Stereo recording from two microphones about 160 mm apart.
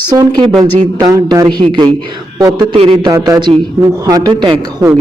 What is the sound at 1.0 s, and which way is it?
Speech, 25° right (ahead or behind).